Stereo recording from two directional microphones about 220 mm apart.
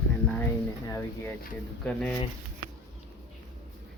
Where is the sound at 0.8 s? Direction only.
10° left (ahead or behind).